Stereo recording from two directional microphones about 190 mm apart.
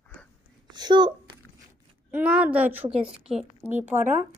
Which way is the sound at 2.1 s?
5° right (ahead or behind).